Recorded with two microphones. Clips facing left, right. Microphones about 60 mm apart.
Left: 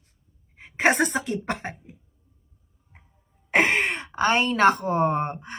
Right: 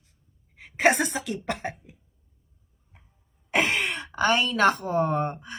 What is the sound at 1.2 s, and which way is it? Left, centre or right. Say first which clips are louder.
Speech: left 2 dB; left.